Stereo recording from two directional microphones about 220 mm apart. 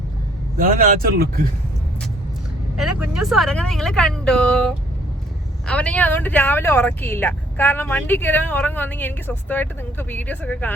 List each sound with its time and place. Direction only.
0.5 s speech: 40° right (ahead or behind)
2.7 s speech: centre (ahead or behind)